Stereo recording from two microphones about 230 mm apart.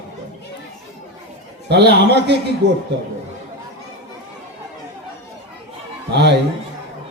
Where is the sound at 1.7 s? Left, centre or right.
Right.